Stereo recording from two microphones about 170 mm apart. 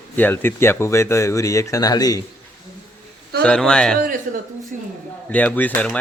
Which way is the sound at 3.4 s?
5° left (ahead or behind).